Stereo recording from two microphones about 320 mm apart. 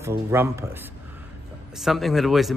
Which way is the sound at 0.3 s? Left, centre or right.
Centre.